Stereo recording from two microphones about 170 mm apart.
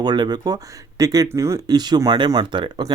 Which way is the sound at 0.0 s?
25° right (ahead or behind).